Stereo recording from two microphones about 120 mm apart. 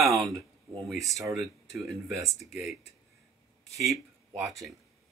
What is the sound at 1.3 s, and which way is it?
Speech, centre (ahead or behind).